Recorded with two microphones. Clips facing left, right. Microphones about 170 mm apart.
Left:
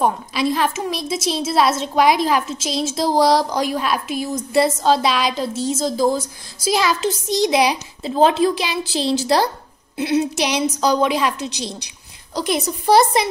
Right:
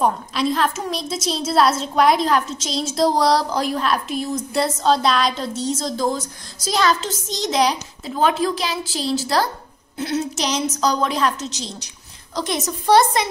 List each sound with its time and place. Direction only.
0.0 s a woman's voice: 5° left (ahead or behind)
8.0 s a woman's voice: 30° left (ahead or behind); by 13.2 s 10° left (ahead or behind)